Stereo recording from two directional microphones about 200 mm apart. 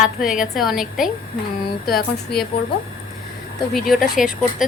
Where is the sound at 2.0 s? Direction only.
50° left (ahead or behind).